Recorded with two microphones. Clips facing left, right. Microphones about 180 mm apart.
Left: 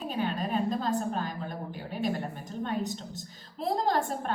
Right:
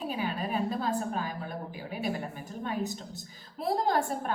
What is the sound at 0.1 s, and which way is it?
A woman's voice, 5° right (ahead or behind).